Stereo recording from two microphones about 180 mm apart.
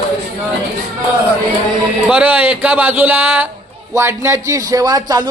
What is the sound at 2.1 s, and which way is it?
A man's voice, 5° right (ahead or behind).